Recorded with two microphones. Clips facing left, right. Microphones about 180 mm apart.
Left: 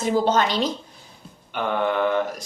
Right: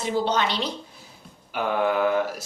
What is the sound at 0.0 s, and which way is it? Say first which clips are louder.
Speech: left 4 dB; 45° left (ahead or behind).